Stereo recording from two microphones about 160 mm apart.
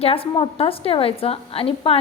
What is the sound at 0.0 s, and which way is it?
A woman's voice, 35° left (ahead or behind).